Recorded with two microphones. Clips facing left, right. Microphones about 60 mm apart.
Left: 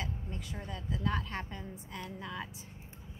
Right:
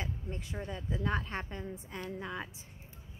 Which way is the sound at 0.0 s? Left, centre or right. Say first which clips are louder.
Even; right.